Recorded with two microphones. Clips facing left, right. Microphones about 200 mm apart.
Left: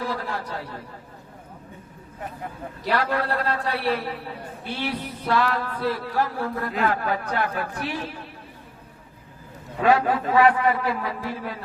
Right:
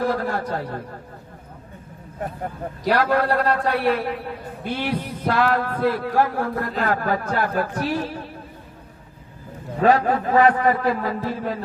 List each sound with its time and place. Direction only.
0.0 s a man's voice: 50° right (ahead or behind)
2.8 s a man's voice: 45° right (ahead or behind)
9.8 s a man's voice: 40° right (ahead or behind)